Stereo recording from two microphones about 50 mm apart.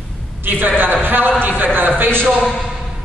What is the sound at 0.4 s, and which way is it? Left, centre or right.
A woman's voice, right.